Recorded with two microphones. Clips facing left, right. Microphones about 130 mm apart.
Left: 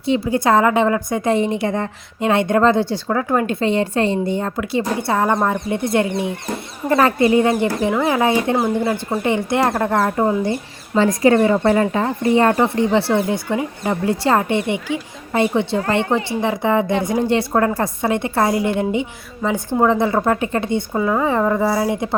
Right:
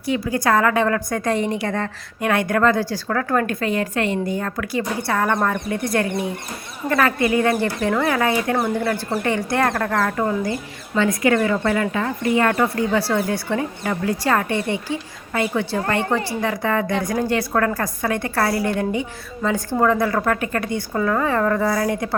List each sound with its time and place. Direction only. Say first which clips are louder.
0.0 s a woman's voice: left 3 dB; 25° left (ahead or behind)